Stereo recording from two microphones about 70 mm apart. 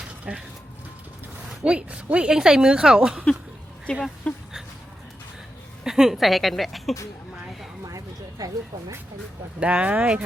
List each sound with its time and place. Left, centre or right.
0.3 s speech: centre
1.6 s speech: centre
4.3 s speech: left
5.8 s speech: centre
8.4 s speech: right
9.6 s speech: centre